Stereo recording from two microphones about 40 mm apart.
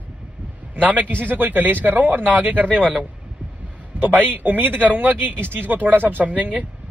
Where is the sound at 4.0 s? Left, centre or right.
Right.